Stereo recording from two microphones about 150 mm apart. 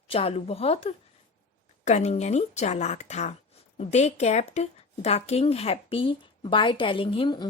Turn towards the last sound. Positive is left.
turn(degrees=30)  # may be behind; listen again after turning